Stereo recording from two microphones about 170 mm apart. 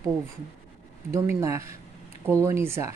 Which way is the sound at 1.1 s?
15° right (ahead or behind).